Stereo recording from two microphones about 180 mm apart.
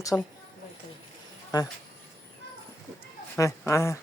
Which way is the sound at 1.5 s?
20° left (ahead or behind).